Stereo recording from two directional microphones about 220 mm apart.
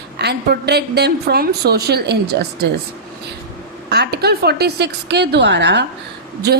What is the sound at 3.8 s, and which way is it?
A woman's voice, 50° right (ahead or behind).